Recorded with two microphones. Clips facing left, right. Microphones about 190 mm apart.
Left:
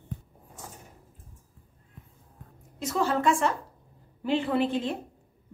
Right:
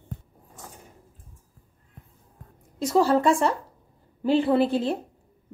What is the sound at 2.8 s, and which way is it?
Speech, 35° right (ahead or behind).